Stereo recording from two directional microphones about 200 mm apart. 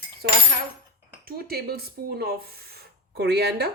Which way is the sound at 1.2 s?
50° right (ahead or behind).